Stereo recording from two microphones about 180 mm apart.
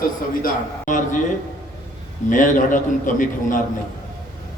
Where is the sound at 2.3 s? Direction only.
45° left (ahead or behind).